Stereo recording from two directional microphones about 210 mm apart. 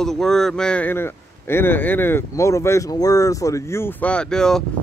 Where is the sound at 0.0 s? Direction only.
Centre (ahead or behind).